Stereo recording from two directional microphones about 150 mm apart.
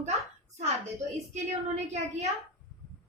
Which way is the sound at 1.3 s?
50° right (ahead or behind).